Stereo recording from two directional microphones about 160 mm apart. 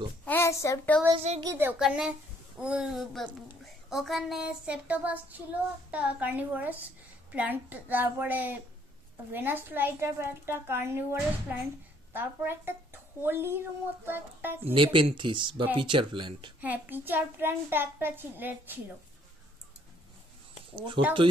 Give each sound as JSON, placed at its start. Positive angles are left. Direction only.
{"t": 0.2, "sound": "a child's voice", "side_deg": 15}
{"t": 1.1, "sound": "a woman's voice", "side_deg": -40}
{"t": 1.4, "sound": "a woman's voice", "side_deg": -15}
{"t": 14.7, "sound": "speech", "side_deg": -30}
{"t": 16.6, "sound": "a woman's voice", "side_deg": -10}
{"t": 20.7, "sound": "speech", "side_deg": -30}